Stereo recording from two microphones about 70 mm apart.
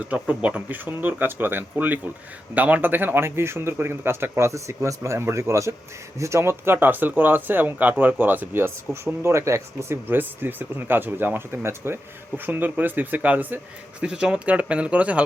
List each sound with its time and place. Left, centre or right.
0.1 s speech: centre; by 10.0 s right
10.1 s speech: right